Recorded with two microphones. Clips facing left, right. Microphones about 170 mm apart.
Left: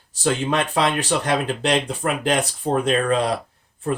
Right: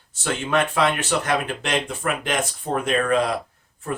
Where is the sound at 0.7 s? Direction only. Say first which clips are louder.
Left 1 dB; 35° left (ahead or behind).